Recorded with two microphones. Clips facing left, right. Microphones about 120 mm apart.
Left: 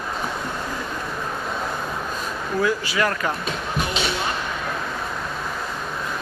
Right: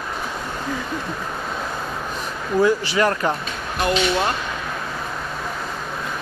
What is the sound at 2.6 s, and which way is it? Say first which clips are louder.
Speech: right 5 dB; 30° right (ahead or behind).